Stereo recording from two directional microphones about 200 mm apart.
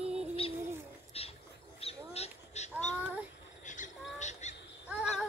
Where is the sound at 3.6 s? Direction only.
40° left (ahead or behind).